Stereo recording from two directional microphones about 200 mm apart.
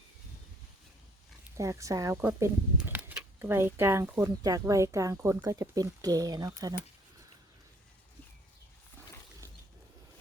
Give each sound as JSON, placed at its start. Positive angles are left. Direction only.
{"t": 1.5, "sound": "speech", "side_deg": -15}